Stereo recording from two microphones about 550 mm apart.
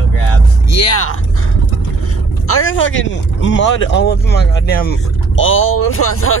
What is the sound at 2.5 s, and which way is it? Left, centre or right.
Speech, left.